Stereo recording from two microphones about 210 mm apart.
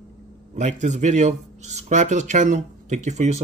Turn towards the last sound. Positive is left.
turn(degrees=-35)  # may be behind; listen again after turning